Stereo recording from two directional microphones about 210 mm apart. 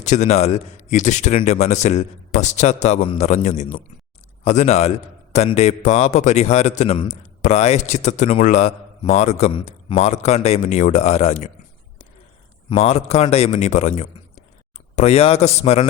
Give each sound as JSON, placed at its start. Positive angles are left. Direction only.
{"t": 0.0, "sound": "a man's voice", "side_deg": 35}
{"t": 12.7, "sound": "a man's voice", "side_deg": 30}